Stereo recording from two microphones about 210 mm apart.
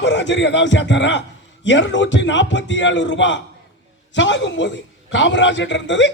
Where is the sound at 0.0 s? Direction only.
60° left (ahead or behind).